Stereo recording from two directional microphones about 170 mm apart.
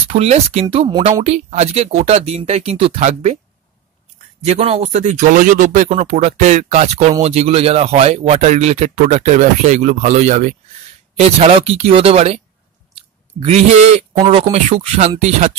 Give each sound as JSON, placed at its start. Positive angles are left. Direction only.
{"t": 0.1, "sound": "speech", "side_deg": -40}
{"t": 4.5, "sound": "speech", "side_deg": -35}
{"t": 13.4, "sound": "speech", "side_deg": -35}